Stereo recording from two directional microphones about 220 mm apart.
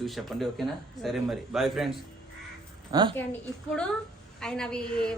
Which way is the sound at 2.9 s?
20° right (ahead or behind).